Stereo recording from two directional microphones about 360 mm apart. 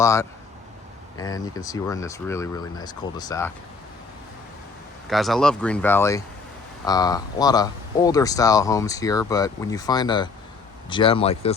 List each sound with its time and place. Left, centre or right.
0.0 s speech: centre
5.0 s speech: centre